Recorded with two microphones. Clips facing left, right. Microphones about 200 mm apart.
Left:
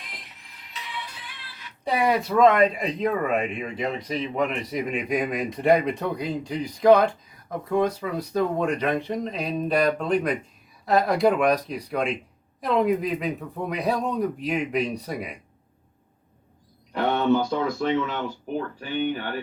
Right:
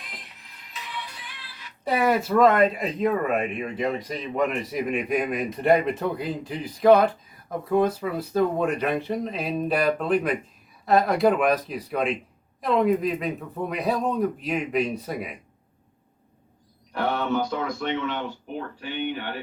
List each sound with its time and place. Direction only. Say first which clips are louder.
1.8 s speech: right 1 dB; centre (ahead or behind)
17.3 s speech: left 3 dB; 30° left (ahead or behind)
18.8 s speech: left 1 dB; 45° left (ahead or behind)